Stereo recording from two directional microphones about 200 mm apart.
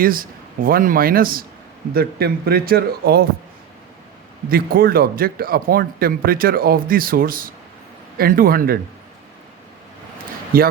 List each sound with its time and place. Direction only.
0.0 s speech: 45° right (ahead or behind)
4.4 s speech: 45° right (ahead or behind)